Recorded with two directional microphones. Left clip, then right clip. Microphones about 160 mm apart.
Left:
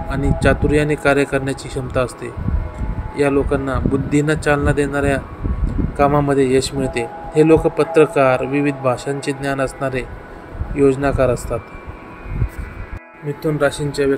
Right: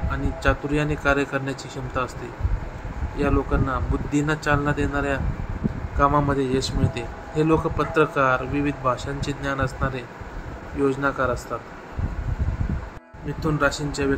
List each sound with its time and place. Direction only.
0.1 s speech: 25° left (ahead or behind)
3.2 s speech: 25° left (ahead or behind)
13.4 s speech: 15° left (ahead or behind)